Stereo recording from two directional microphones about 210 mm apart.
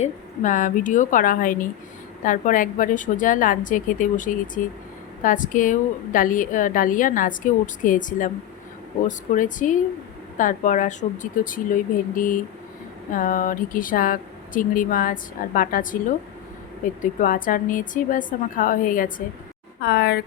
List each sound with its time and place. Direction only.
0.0 s speech: 35° left (ahead or behind)